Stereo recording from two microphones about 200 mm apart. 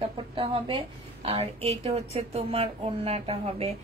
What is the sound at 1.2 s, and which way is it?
A woman's voice, 30° right (ahead or behind).